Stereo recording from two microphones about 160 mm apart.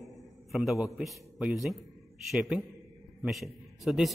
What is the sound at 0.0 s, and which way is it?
A man's voice, centre (ahead or behind).